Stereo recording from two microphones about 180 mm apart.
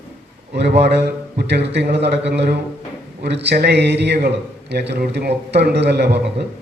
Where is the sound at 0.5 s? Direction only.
70° right (ahead or behind).